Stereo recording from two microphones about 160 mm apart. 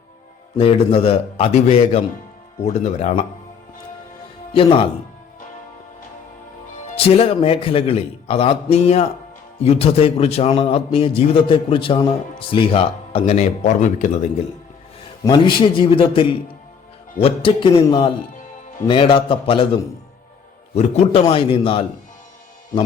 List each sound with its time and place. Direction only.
0.5 s a man's voice: 35° left (ahead or behind)
4.5 s a man's voice: 35° left (ahead or behind)
6.9 s a man's voice: 40° left (ahead or behind)
15.2 s a man's voice: 30° left (ahead or behind)